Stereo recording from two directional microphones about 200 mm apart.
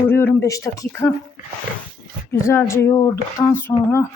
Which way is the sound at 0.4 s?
15° left (ahead or behind).